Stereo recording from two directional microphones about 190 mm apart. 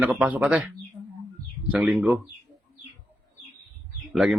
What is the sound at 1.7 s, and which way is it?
Speech, 5° right (ahead or behind).